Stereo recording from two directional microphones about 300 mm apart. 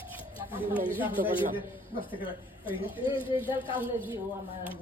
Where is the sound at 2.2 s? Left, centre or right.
Centre.